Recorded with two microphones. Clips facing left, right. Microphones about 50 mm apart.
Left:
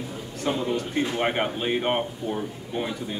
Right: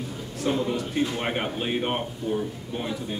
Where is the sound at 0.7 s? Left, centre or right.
Left.